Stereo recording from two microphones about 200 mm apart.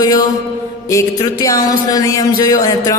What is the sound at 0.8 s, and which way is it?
A man's voice, 15° left (ahead or behind).